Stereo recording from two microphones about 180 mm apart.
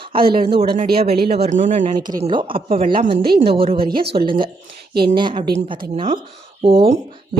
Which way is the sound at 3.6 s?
30° right (ahead or behind).